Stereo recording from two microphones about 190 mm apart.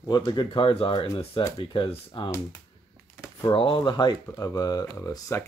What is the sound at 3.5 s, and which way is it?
Speech, 25° left (ahead or behind).